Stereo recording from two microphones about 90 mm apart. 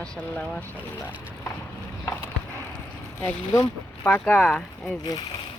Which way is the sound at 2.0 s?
30° left (ahead or behind).